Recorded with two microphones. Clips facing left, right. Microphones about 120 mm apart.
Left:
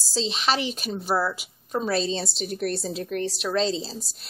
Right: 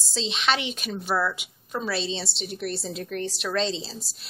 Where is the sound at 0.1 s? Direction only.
35° left (ahead or behind).